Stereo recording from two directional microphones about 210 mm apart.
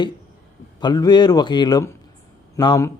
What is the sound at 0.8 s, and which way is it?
A man's voice, 20° left (ahead or behind).